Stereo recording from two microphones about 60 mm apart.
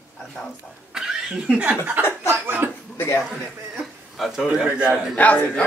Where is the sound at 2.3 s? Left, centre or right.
Right.